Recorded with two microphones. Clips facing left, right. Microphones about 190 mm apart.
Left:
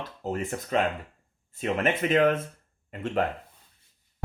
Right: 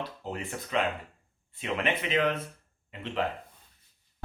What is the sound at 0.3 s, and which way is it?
Speech, 45° left (ahead or behind).